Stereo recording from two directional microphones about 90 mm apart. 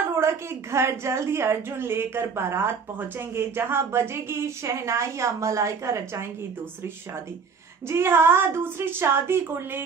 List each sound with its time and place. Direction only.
0.1 s a woman's voice: 30° right (ahead or behind)
7.9 s a woman's voice: 25° right (ahead or behind)